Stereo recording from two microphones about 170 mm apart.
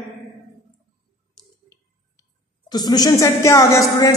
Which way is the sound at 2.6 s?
25° left (ahead or behind).